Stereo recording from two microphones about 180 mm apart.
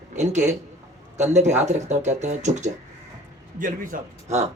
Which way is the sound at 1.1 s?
40° right (ahead or behind).